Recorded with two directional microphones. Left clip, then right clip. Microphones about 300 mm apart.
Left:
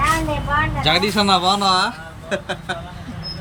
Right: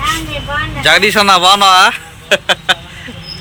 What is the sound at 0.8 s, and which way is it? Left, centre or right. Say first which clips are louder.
Speech: right 13 dB; centre.